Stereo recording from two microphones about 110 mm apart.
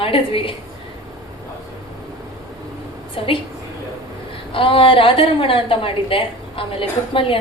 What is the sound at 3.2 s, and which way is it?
Speech, 55° left (ahead or behind).